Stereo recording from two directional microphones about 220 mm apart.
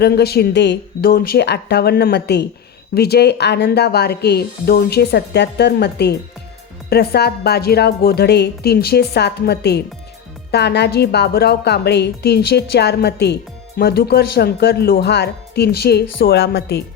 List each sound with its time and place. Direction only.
0.0 s a woman's voice: 45° left (ahead or behind)